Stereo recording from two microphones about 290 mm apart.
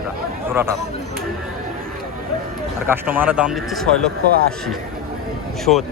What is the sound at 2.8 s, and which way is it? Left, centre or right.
Speech, centre.